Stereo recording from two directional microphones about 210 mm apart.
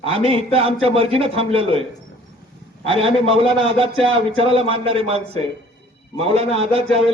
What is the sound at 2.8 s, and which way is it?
A man's voice, 25° right (ahead or behind).